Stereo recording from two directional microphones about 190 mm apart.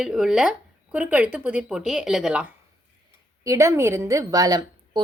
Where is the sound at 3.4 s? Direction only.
15° right (ahead or behind).